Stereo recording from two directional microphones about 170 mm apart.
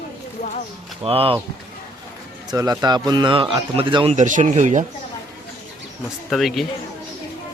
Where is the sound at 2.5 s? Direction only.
20° right (ahead or behind).